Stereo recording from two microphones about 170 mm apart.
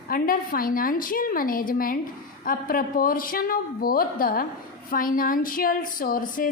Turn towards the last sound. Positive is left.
turn(degrees=55)  # may be behind; listen again after turning